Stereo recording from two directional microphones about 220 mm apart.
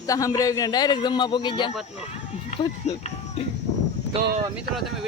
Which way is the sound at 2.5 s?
30° left (ahead or behind).